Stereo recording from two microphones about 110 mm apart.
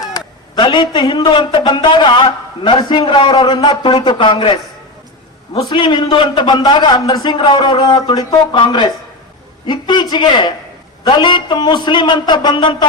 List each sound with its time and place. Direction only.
0.5 s a man's voice: 45° left (ahead or behind)
5.7 s a man's voice: 45° left (ahead or behind)